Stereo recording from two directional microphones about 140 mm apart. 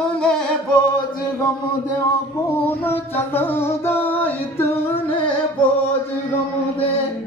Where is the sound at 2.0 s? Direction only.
20° left (ahead or behind).